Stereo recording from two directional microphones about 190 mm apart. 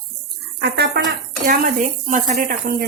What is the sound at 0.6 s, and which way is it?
Speech, 60° right (ahead or behind).